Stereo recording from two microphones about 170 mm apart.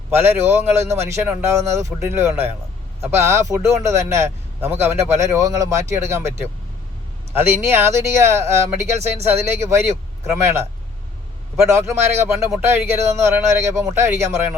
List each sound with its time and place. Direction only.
0.1 s speech: 15° right (ahead or behind)